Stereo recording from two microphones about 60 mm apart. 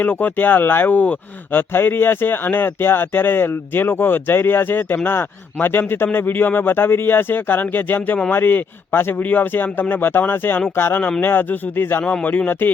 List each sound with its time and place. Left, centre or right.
0.0 s speech: left
12.0 s speech: left